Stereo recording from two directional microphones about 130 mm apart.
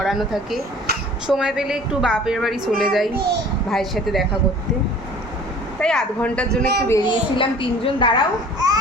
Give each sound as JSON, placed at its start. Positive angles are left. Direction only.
{"t": 0.0, "sound": "a woman's voice", "side_deg": 0}
{"t": 5.8, "sound": "a woman's voice", "side_deg": 5}
{"t": 6.9, "sound": "a woman's voice", "side_deg": 35}
{"t": 8.5, "sound": "babbling", "side_deg": -30}